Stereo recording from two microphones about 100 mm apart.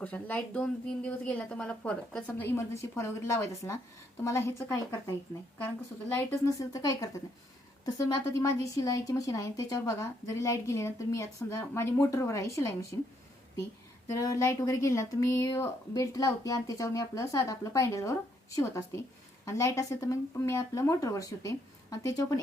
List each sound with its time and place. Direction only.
0.0 s a woman's voice: 15° left (ahead or behind)
2.4 s a woman's voice: 25° left (ahead or behind)
6.1 s a woman's voice: 30° left (ahead or behind)
14.1 s a woman's voice: 35° left (ahead or behind)